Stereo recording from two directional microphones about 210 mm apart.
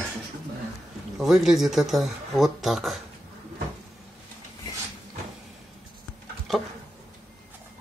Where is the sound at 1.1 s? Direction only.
Centre (ahead or behind).